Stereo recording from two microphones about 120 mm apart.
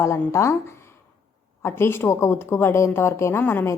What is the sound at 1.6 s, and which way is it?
A woman's voice, 20° left (ahead or behind).